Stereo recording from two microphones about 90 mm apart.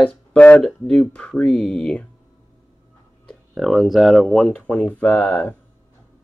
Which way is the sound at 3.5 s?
Centre (ahead or behind).